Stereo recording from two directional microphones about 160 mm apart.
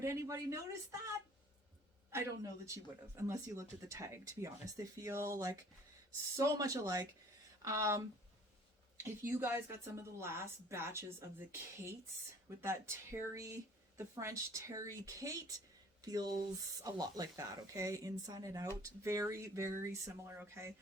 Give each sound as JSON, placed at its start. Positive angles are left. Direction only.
{"t": 0.0, "sound": "speech", "side_deg": -20}